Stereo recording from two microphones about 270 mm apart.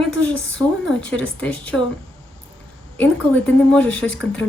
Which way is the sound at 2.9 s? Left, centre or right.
Centre.